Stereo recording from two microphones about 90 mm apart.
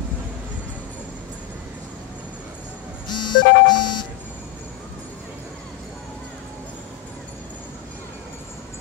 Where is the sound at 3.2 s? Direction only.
55° left (ahead or behind).